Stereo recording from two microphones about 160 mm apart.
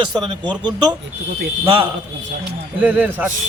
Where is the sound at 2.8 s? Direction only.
10° right (ahead or behind).